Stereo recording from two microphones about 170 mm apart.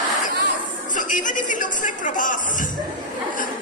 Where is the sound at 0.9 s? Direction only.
50° left (ahead or behind).